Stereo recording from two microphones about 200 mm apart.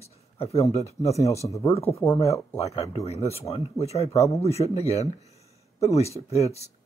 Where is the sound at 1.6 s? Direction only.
30° left (ahead or behind).